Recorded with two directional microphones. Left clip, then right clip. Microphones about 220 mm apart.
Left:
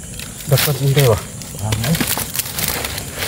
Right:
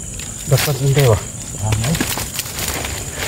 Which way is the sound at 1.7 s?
25° left (ahead or behind).